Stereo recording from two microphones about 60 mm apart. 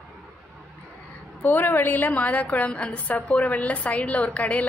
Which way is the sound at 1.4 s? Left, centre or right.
Left.